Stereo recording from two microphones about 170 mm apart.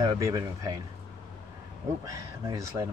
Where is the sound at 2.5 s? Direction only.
20° right (ahead or behind).